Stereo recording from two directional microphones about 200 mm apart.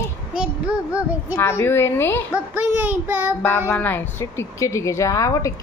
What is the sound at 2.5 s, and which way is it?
Speech, 10° right (ahead or behind).